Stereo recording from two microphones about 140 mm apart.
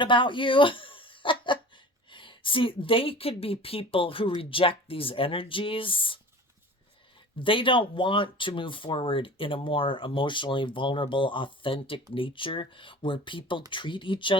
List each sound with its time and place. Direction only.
0.0 s speech: 35° left (ahead or behind)
7.3 s speech: 40° left (ahead or behind)